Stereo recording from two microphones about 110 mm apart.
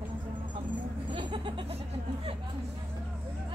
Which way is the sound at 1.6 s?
65° right (ahead or behind).